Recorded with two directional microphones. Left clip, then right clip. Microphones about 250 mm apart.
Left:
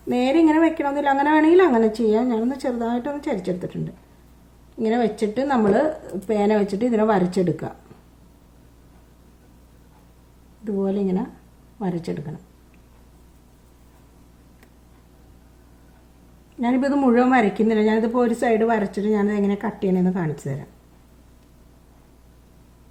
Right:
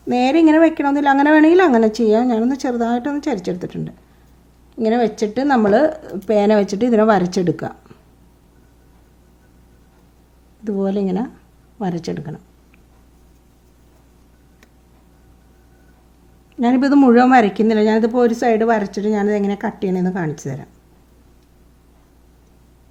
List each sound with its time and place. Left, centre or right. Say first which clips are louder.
0.1 s speech: right 4 dB; right
4.8 s speech: right 4 dB; right
10.6 s speech: right 3 dB; right
16.6 s speech: right 7 dB; right